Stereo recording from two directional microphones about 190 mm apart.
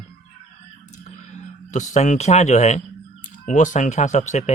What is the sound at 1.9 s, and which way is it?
Speech, 35° left (ahead or behind).